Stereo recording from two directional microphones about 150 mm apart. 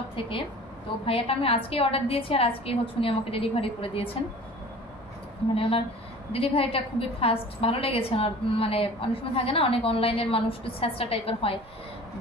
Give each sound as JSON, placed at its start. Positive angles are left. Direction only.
{"t": 1.0, "sound": "a woman's voice", "side_deg": 40}
{"t": 5.5, "sound": "a woman's voice", "side_deg": 40}